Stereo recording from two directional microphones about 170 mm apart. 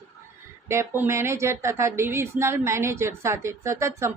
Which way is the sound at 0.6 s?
15° right (ahead or behind).